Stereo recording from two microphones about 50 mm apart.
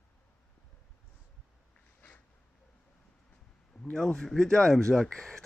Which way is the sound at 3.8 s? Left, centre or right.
Centre.